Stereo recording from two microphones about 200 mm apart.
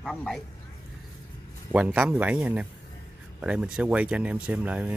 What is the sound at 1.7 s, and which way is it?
Speech, 5° right (ahead or behind).